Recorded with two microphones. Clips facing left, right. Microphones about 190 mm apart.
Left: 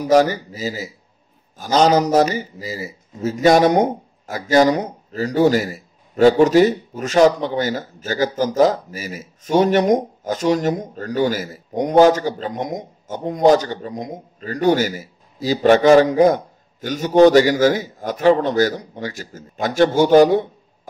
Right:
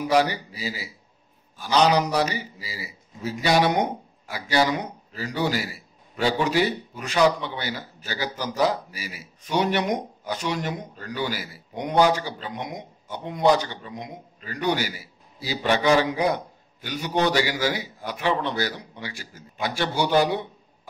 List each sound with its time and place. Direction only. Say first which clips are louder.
0.0 s a man's voice: left 7 dB; 45° left (ahead or behind)